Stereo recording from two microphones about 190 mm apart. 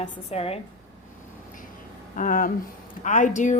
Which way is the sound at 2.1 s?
45° left (ahead or behind).